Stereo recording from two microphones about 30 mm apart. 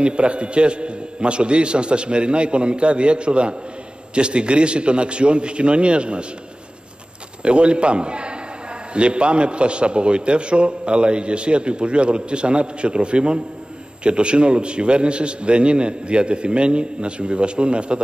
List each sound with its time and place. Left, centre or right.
0.0 s a man's voice: right
7.4 s a man's voice: right